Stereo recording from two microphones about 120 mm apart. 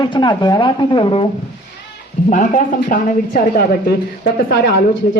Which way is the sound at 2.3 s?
90° left.